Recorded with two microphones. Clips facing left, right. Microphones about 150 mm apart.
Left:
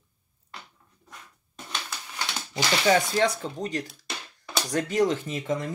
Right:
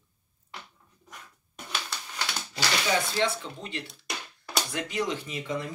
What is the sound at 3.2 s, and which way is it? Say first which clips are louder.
Speech: left 4 dB; 45° left (ahead or behind).